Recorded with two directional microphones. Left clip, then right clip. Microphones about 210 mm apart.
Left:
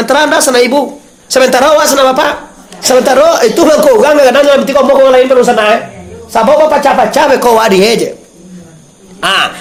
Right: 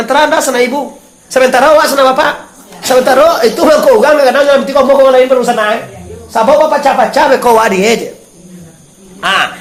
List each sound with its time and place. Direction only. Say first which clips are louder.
0.0 s a woman's voice: left 1 dB; 45° left (ahead or behind)
9.2 s a woman's voice: left 1 dB; 45° left (ahead or behind)